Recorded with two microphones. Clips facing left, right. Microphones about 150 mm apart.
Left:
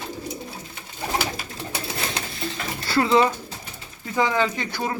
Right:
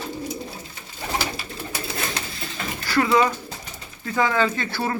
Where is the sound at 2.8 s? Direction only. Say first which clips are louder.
Left 1 dB; 25° left (ahead or behind).